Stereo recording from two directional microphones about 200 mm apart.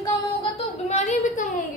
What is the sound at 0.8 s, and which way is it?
Speech, 35° left (ahead or behind).